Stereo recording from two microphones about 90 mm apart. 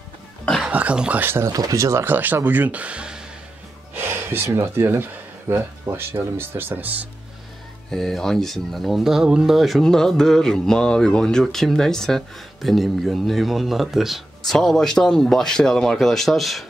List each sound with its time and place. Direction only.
0.7 s speech: 15° right (ahead or behind)
1.2 s speech: 25° right (ahead or behind)
1.5 s speech: 40° right (ahead or behind); by 3.3 s 10° right (ahead or behind)
3.9 s speech: 25° right (ahead or behind)
7.9 s speech: 5° left (ahead or behind)